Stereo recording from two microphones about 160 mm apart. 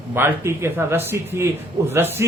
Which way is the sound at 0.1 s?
15° right (ahead or behind).